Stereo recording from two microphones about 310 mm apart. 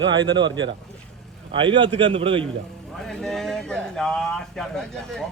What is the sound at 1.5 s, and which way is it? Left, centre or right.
Speech, centre.